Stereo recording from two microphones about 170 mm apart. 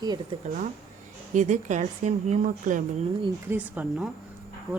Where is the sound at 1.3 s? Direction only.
45° right (ahead or behind).